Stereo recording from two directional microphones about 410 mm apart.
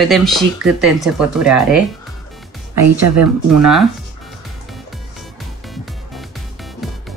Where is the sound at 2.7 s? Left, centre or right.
Right.